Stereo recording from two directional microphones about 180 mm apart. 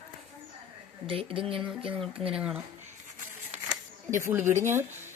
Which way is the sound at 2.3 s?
5° right (ahead or behind).